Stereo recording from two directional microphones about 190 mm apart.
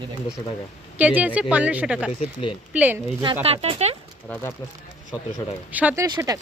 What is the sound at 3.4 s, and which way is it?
Speech, 30° right (ahead or behind).